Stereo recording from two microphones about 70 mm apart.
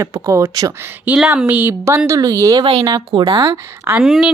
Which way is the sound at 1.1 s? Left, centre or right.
Right.